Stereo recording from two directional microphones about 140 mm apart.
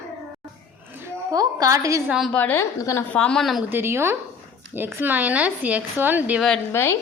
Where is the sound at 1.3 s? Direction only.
25° right (ahead or behind).